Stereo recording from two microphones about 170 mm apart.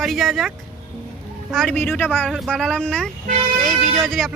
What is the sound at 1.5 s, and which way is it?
Speech, 5° left (ahead or behind).